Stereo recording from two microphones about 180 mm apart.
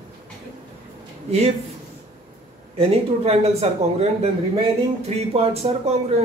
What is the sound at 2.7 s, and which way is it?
Speech, 35° right (ahead or behind).